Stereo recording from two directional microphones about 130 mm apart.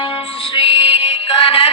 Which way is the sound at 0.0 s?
45° left (ahead or behind).